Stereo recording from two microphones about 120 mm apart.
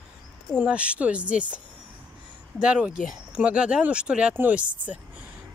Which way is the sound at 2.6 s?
10° right (ahead or behind).